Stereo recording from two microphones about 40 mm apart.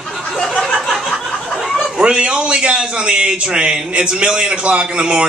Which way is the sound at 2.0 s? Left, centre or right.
Right.